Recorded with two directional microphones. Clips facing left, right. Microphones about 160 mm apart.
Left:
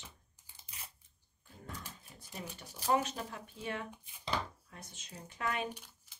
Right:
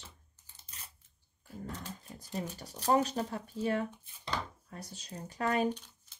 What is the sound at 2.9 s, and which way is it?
Speech, 35° right (ahead or behind).